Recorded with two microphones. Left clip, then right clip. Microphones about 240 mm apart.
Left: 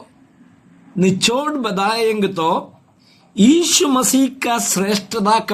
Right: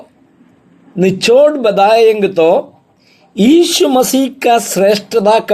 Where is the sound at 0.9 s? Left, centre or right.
Centre.